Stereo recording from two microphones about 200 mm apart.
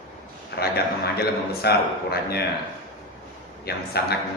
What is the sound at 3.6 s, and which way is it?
Speech, 55° left (ahead or behind).